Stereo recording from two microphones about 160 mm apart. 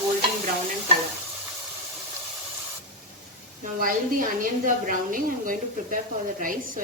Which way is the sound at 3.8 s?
60° right (ahead or behind).